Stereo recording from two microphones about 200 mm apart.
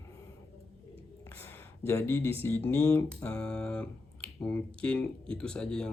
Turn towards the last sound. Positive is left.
turn(degrees=5)  # may be behind; listen again after turning